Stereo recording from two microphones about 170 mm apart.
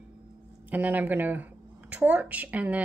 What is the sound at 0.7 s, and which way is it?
A woman's voice, 10° right (ahead or behind).